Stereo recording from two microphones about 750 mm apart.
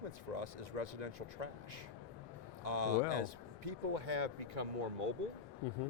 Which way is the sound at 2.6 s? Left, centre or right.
Right.